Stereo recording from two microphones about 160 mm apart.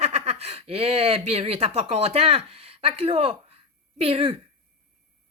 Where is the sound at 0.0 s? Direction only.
40° right (ahead or behind).